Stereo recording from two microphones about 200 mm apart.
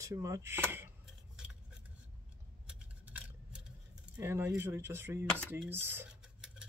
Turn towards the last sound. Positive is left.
turn(degrees=-5)  # may be behind; listen again after turning